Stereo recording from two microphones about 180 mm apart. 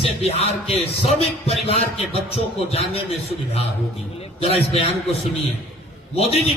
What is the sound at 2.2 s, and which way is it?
Speech, 35° left (ahead or behind).